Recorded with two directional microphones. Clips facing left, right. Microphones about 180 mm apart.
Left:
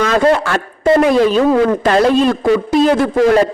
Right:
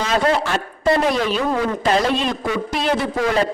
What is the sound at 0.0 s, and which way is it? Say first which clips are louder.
A man's voice: left 6 dB; 55° left (ahead or behind).